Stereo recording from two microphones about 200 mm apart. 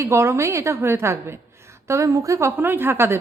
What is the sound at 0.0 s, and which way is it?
A woman's voice, 15° right (ahead or behind).